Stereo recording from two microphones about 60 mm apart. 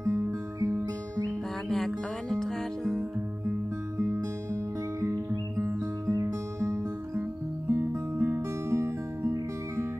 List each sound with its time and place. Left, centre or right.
0.0 s music: right
1.7 s music: centre
6.0 s music: right
8.2 s music: right
8.7 s music: right